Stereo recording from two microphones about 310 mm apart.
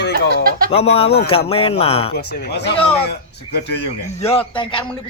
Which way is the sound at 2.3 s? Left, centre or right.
Left.